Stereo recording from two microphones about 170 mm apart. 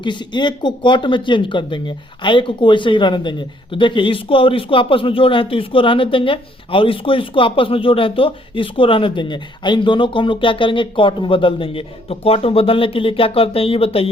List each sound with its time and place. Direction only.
0.0 s a man's voice: 25° left (ahead or behind)